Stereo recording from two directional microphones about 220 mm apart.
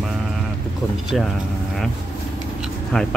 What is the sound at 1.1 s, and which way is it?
Speech, centre (ahead or behind).